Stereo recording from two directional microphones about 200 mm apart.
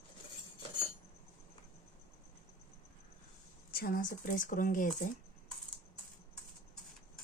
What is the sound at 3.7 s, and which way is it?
Speech, 50° left (ahead or behind).